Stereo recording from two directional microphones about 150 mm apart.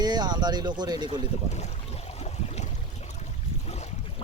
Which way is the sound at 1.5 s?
50° left (ahead or behind).